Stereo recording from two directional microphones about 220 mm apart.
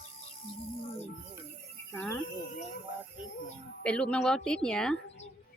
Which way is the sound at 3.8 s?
5° left (ahead or behind).